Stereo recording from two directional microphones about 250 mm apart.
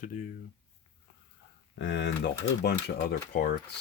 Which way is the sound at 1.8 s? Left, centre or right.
Left.